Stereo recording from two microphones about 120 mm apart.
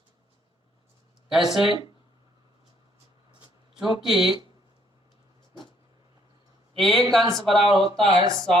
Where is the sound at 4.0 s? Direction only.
5° right (ahead or behind).